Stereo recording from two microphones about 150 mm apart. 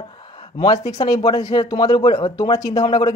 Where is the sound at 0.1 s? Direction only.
35° left (ahead or behind).